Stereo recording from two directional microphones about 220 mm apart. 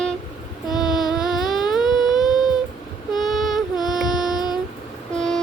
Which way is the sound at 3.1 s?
Centre (ahead or behind).